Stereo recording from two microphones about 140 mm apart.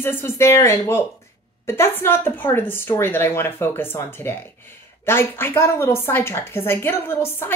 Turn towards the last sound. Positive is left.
turn(degrees=15)  # may be behind; listen again after turning